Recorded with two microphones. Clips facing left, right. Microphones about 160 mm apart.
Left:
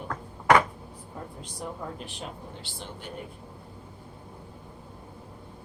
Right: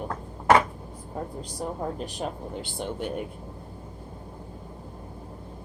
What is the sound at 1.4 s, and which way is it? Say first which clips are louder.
Speech: right 4 dB; 40° right (ahead or behind).